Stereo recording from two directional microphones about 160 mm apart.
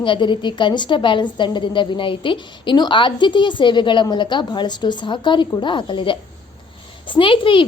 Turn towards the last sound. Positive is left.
turn(degrees=30)  # may be behind; listen again after turning